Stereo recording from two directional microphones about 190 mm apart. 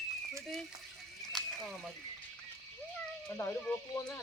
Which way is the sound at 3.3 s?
15° left (ahead or behind).